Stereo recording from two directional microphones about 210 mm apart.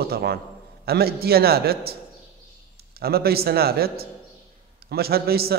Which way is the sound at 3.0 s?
45° right (ahead or behind).